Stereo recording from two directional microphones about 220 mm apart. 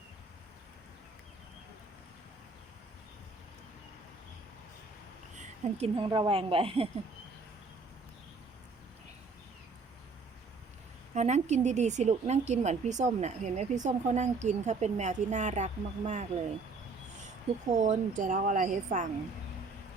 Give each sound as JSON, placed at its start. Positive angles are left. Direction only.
{"t": 5.6, "sound": "speech", "side_deg": -30}
{"t": 11.1, "sound": "a woman's voice", "side_deg": -30}
{"t": 17.2, "sound": "a woman's voice", "side_deg": -35}